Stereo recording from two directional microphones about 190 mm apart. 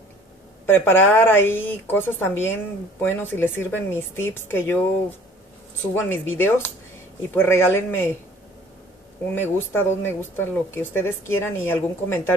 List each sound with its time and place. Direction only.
0.7 s speech: 10° left (ahead or behind)
5.9 s speech: 10° left (ahead or behind)
9.2 s speech: 10° left (ahead or behind)